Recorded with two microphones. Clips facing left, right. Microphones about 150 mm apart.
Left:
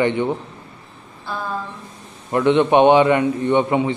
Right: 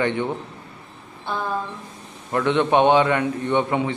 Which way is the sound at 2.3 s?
15° left (ahead or behind).